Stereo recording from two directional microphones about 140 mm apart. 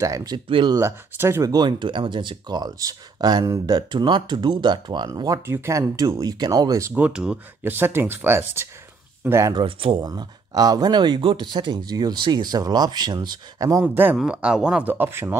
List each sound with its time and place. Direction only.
0.0 s speech: 25° right (ahead or behind)
0.5 s speech: 35° right (ahead or behind)
0.7 s speech: 20° right (ahead or behind)
1.5 s speech: 35° right (ahead or behind)
6.9 s speech: 5° right (ahead or behind)
9.5 s speech: 35° right (ahead or behind)
10.0 s speech: 25° right (ahead or behind)
13.8 s speech: 15° right (ahead or behind)